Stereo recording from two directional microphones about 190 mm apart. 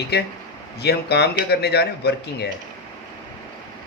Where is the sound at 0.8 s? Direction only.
60° left (ahead or behind).